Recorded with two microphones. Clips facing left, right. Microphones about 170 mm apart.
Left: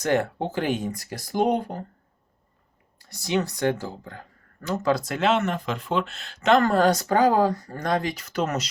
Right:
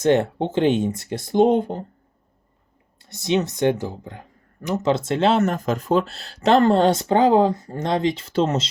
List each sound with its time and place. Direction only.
0.0 s speech: 25° right (ahead or behind)
3.0 s speech: 25° right (ahead or behind)